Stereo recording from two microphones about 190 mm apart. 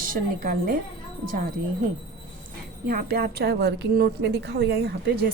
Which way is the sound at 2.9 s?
55° right (ahead or behind).